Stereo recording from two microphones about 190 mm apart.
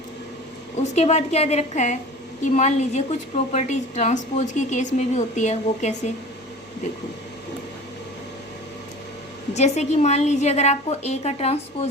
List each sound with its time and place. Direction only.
0.8 s a woman's voice: 35° left (ahead or behind)
9.6 s a woman's voice: 35° left (ahead or behind)